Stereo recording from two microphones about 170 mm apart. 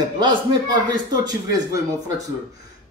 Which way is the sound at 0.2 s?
25° right (ahead or behind).